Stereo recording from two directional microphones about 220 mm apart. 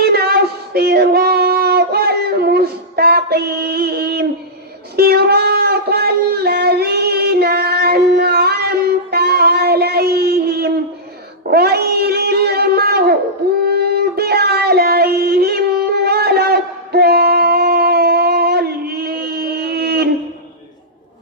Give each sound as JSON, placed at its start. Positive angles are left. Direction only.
{"t": 0.0, "sound": "child singing", "side_deg": -45}
{"t": 4.9, "sound": "a sound", "side_deg": -45}
{"t": 13.7, "sound": "music", "side_deg": -45}